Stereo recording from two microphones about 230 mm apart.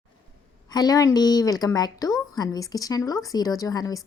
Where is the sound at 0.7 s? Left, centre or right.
Centre.